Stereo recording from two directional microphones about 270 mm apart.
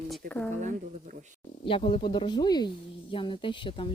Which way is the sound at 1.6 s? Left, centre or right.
Centre.